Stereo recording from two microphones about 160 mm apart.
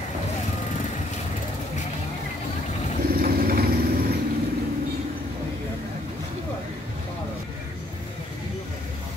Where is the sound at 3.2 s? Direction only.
65° right (ahead or behind).